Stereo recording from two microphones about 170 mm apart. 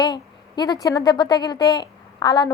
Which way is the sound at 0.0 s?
25° left (ahead or behind).